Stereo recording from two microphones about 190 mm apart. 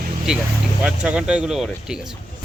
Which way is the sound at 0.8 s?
5° right (ahead or behind).